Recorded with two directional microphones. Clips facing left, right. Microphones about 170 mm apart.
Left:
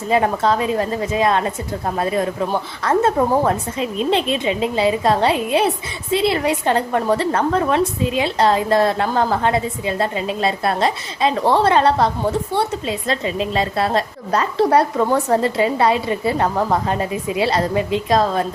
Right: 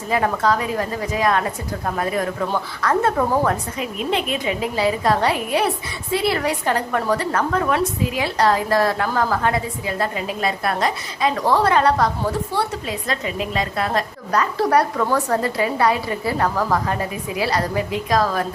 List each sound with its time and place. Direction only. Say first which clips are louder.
0.1 s a woman's voice: left 2 dB; 25° left (ahead or behind)